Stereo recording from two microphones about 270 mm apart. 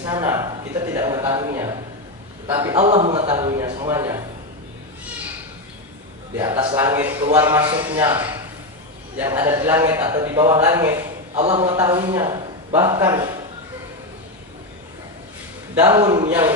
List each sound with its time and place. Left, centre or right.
0.0 s a man's voice: centre
2.7 s a man's voice: right
6.3 s a man's voice: centre
11.3 s a man's voice: right
15.7 s a man's voice: centre